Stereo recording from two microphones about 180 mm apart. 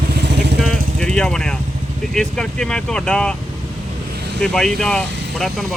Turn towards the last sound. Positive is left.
turn(degrees=0)  # may be behind; listen again after turning